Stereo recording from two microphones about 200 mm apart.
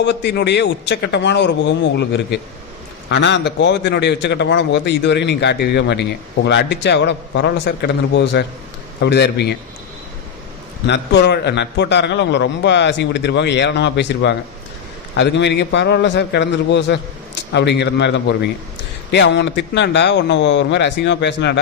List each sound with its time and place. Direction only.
0.0 s a man's voice: 60° left (ahead or behind)
10.8 s a man's voice: 60° left (ahead or behind)